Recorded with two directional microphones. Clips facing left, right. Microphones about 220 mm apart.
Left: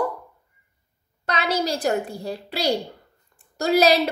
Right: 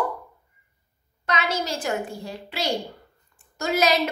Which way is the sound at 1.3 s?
35° left (ahead or behind).